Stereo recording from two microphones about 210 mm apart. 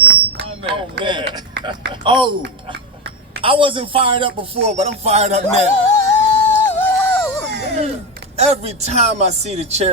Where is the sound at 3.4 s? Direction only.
25° right (ahead or behind).